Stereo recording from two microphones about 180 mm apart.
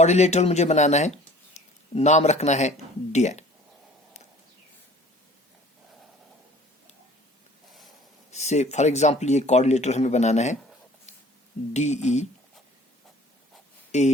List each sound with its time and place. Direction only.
0.0 s speech: 40° left (ahead or behind)
8.3 s speech: 40° left (ahead or behind)
11.7 s speech: 40° left (ahead or behind)